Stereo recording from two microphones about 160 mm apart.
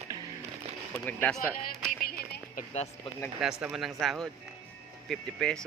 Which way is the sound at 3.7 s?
Centre (ahead or behind).